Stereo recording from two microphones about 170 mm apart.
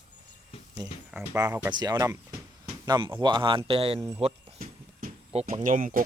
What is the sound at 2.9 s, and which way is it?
Speech, 25° right (ahead or behind).